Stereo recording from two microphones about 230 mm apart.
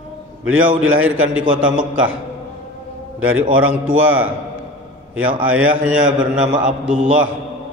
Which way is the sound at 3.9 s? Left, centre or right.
Right.